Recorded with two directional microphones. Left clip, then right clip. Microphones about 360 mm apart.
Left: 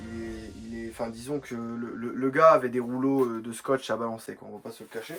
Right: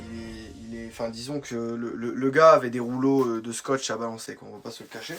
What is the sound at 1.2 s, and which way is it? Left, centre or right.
Speech, centre.